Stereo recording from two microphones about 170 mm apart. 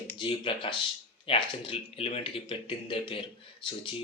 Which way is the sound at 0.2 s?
30° left (ahead or behind).